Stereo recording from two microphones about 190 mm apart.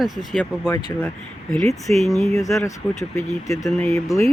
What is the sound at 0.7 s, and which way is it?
Speech, 10° left (ahead or behind).